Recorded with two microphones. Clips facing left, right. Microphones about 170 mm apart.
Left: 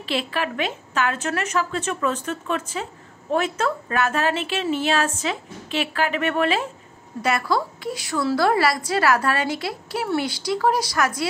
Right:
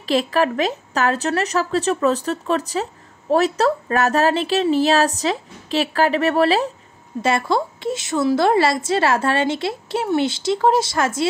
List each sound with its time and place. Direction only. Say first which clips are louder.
0.0 s a woman's voice: right 7 dB; 40° right (ahead or behind)
7.2 s a woman's voice: right 3 dB; 25° right (ahead or behind)